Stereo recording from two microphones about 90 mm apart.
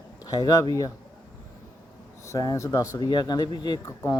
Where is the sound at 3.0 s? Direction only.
50° left (ahead or behind).